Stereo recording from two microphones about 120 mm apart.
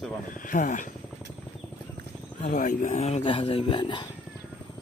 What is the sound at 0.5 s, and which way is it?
Speech, 90° left.